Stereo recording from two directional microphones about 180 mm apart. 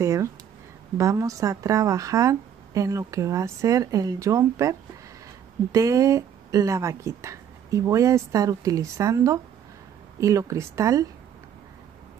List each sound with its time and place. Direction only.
0.0 s speech: 15° right (ahead or behind)